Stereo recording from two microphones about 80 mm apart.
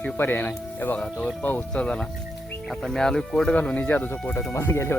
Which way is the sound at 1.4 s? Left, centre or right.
Left.